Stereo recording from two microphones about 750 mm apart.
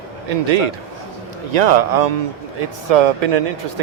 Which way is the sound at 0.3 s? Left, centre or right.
Right.